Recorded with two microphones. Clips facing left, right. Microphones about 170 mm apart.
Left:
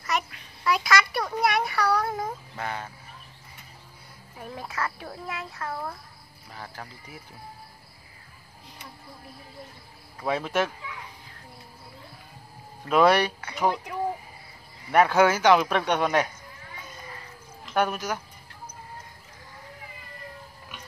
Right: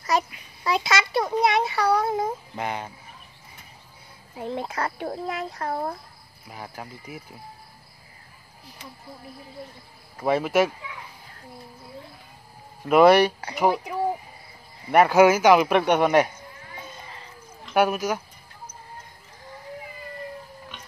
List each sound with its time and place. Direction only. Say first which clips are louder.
0.7 s a sound: even; 25° right (ahead or behind)
4.4 s a child's voice: right 5 dB; 30° right (ahead or behind)
6.5 s speech: right 3 dB; 15° right (ahead or behind)
10.2 s speech: right 5 dB; 10° right (ahead or behind)
12.8 s speech: right 5 dB; 10° right (ahead or behind)
17.7 s speech: right 4 dB; 10° right (ahead or behind)